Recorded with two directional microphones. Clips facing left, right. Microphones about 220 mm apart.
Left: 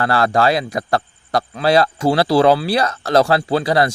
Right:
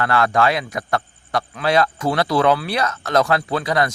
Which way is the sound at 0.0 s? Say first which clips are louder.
Left 2 dB; 35° left (ahead or behind).